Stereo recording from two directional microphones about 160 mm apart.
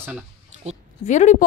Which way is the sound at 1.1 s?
50° left (ahead or behind).